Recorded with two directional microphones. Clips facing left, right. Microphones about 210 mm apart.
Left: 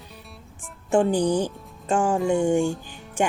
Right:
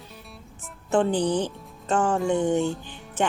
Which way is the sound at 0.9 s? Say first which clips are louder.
Left 2 dB; 10° left (ahead or behind).